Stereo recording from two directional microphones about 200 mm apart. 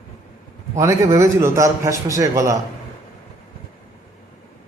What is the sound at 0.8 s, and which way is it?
A man's voice, 15° right (ahead or behind).